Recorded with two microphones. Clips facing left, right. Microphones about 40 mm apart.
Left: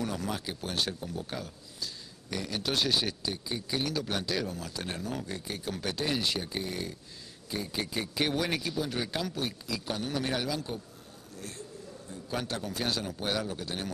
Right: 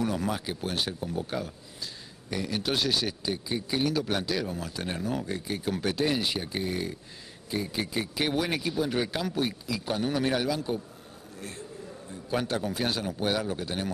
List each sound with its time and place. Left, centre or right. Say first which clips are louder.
0.0 s speech: right 4 dB; centre
1.3 s a sound: right 5 dB; centre
2.4 s speech: right 2 dB; centre
12.1 s speech: right 5 dB; centre